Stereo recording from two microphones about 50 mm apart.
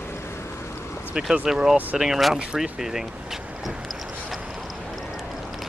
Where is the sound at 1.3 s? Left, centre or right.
Centre.